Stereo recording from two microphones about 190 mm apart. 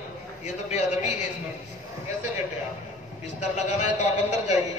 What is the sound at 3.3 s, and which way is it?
A man's voice, 40° left (ahead or behind).